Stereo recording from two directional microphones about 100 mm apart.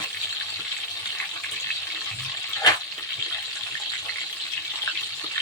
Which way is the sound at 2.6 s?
40° left (ahead or behind).